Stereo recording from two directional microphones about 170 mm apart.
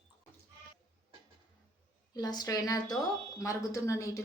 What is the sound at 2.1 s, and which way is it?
Speech, 25° left (ahead or behind).